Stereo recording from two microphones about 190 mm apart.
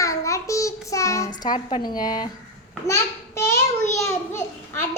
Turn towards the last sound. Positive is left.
turn(degrees=15)  # may be behind; listen again after turning